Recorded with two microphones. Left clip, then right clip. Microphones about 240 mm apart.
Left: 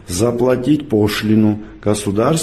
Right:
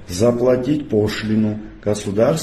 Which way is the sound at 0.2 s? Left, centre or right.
Left.